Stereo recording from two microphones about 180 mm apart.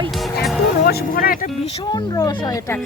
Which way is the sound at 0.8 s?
60° left (ahead or behind).